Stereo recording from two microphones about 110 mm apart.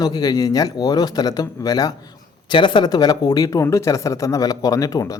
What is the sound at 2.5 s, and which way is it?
Speech, 45° left (ahead or behind).